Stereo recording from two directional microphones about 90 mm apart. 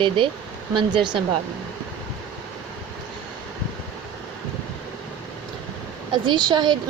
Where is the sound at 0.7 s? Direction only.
60° right (ahead or behind).